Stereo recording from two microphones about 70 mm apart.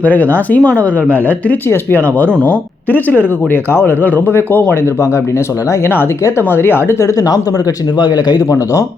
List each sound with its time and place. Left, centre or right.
0.0 s speech: left
6.5 s speech: left
7.0 s speech: left
7.9 s speech: left
8.4 s speech: left